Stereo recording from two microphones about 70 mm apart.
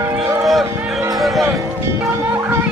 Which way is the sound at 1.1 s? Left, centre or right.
Centre.